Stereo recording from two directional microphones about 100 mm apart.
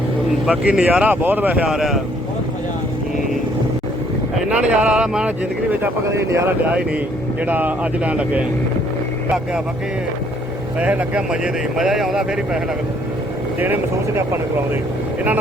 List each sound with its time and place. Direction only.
0.4 s speech: 10° right (ahead or behind)
4.4 s speech: 10° right (ahead or behind)
5.8 s speech: 30° right (ahead or behind)
7.4 s speech: 15° right (ahead or behind)
10.8 s speech: 15° right (ahead or behind)